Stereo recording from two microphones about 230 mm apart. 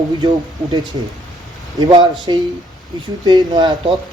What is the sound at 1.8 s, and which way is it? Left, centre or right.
Speech, centre.